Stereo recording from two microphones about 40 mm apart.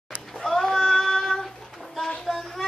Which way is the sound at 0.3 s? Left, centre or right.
Centre.